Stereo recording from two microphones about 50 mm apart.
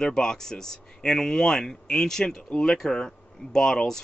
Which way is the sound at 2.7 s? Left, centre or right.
Centre.